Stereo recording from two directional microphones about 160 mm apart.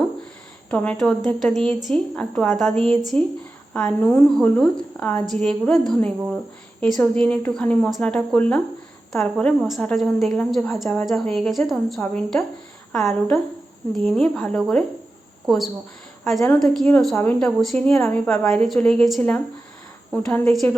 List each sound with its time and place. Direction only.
0.7 s a woman's voice: 10° left (ahead or behind)